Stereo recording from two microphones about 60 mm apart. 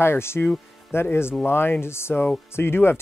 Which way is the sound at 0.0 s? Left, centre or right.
Left.